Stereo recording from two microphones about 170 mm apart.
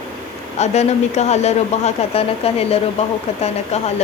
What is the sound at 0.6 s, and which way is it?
Speech, 40° left (ahead or behind).